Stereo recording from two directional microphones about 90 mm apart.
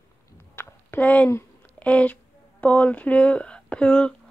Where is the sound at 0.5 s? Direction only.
25° left (ahead or behind).